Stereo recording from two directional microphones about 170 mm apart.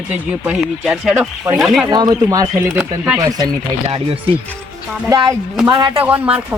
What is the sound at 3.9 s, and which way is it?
Speech, 35° right (ahead or behind).